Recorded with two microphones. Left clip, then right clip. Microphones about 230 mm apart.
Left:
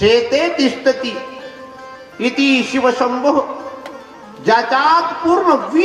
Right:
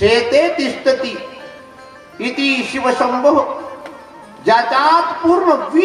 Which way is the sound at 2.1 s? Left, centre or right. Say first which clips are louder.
Left 2 dB; left.